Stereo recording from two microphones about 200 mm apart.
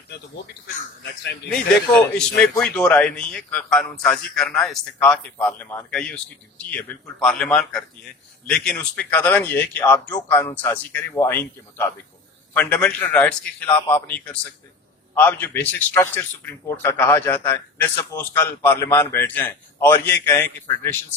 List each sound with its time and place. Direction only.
1.0 s speech: 55° left (ahead or behind)
1.5 s a man's voice: 5° left (ahead or behind)